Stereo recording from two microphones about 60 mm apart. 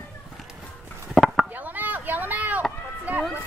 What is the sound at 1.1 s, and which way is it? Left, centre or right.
Chop, centre.